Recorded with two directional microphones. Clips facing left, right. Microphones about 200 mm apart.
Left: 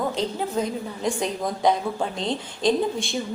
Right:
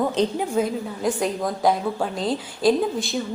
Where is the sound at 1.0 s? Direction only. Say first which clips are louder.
Right 2 dB; centre (ahead or behind).